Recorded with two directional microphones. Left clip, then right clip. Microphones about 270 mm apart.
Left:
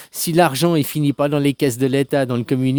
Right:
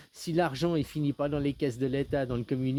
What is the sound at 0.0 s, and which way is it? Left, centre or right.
Speech, left.